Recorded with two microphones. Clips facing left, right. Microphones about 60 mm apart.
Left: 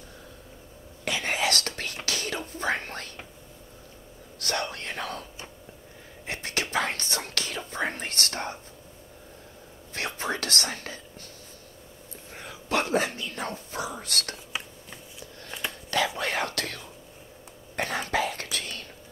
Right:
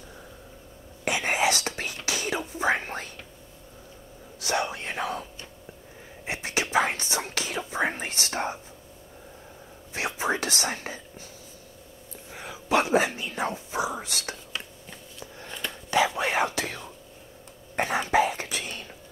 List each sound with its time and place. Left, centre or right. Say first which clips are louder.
1.0 s whispering: right 3 dB; right
4.4 s whispering: right 3 dB; centre
6.2 s whispering: right 2 dB; centre
9.9 s whispering: right 3 dB; centre
12.3 s whispering: right 4 dB; centre
14.5 s a sound: left 1 dB; centre
15.5 s whispering: left 1 dB; centre
16.2 s whispering: right 3 dB; centre
17.7 s a sound: right 5 dB; centre